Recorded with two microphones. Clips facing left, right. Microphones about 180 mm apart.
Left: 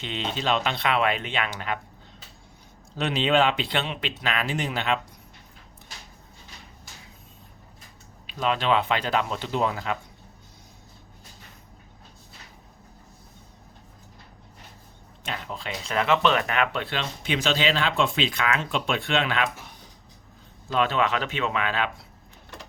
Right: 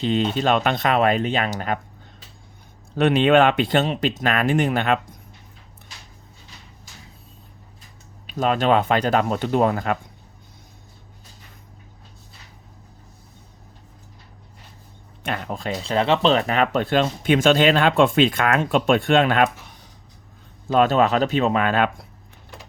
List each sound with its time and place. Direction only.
0.0 s speech: 40° right (ahead or behind)
2.9 s speech: 55° right (ahead or behind)
8.3 s speech: 45° right (ahead or behind)
15.2 s speech: 55° right (ahead or behind)
15.8 s speech: 30° right (ahead or behind); by 19.5 s 50° right (ahead or behind)
20.7 s speech: 45° right (ahead or behind)